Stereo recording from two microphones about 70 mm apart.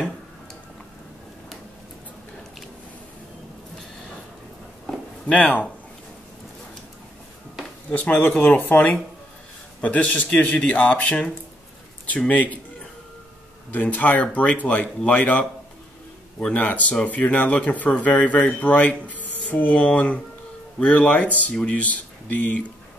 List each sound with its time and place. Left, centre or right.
5.2 s speech: left
7.9 s speech: left
12.3 s speech: left
13.7 s speech: left